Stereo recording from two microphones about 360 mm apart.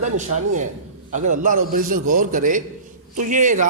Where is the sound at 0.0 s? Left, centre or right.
Centre.